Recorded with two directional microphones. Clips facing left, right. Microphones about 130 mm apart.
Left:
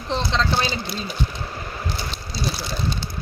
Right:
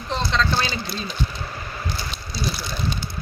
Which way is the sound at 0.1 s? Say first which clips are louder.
Even; 25° left (ahead or behind).